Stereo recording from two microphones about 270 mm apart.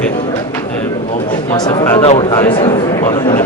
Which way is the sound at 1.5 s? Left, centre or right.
Centre.